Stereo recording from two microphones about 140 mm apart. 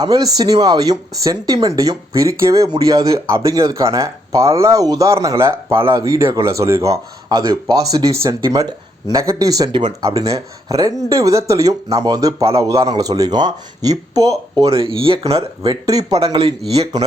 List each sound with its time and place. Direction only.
0.0 s speech: 25° right (ahead or behind)
14.7 s speech: 40° right (ahead or behind)